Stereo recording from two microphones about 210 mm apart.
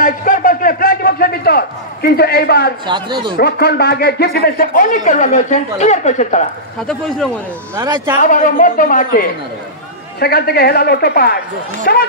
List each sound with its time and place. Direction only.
0.0 s a sound: 40° left (ahead or behind)
2.9 s speech: 20° right (ahead or behind)
3.3 s a man's voice: 50° left (ahead or behind)
7.7 s speech: 15° right (ahead or behind)
8.2 s a man's voice: 40° left (ahead or behind)